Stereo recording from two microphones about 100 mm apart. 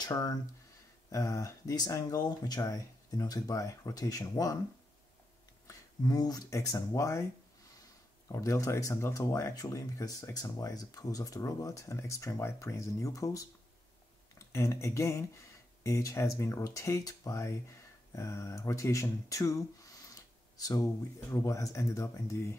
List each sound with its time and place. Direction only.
0.0 s speech: 40° left (ahead or behind)
5.7 s speech: 40° left (ahead or behind)
8.3 s speech: 30° left (ahead or behind)
14.5 s speech: 30° left (ahead or behind)